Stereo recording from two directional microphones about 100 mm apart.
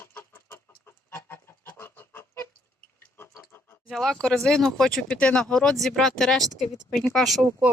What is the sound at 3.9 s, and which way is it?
Speech, 5° left (ahead or behind).